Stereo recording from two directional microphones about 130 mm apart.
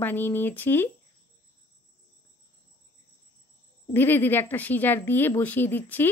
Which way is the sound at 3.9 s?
15° left (ahead or behind).